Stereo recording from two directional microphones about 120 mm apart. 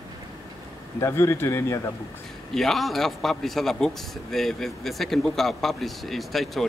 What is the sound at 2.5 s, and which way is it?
A man's voice, centre (ahead or behind).